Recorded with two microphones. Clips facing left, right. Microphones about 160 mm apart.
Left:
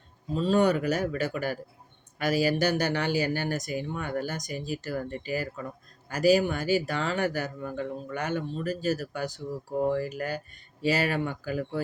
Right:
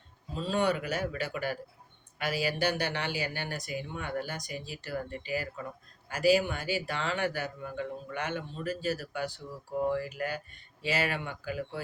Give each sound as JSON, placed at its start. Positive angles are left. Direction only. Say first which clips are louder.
{"t": 0.3, "sound": "speech", "louder": "left 6 dB", "side_deg": 40}